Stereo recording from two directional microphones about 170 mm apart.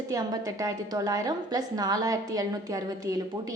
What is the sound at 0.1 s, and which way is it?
A woman's voice, 20° right (ahead or behind).